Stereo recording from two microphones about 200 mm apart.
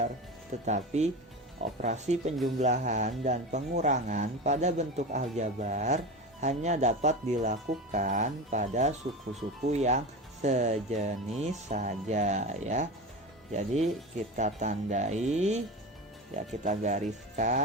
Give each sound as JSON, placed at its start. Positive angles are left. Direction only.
{"t": 0.6, "sound": "speech", "side_deg": -35}
{"t": 16.6, "sound": "speech", "side_deg": -35}